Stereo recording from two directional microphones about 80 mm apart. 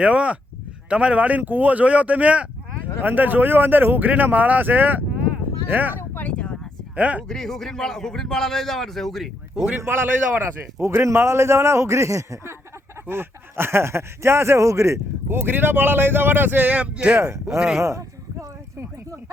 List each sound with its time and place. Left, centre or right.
0.0 s speech: centre
6.0 s a sound: left
6.9 s speech: centre
7.3 s a man's voice: centre
10.3 s a man's voice: right
13.1 s speech: right; by 17.2 s centre
17.2 s a man's voice: right
17.7 s a sound: right